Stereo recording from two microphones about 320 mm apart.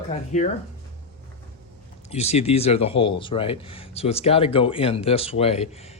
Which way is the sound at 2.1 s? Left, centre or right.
Centre.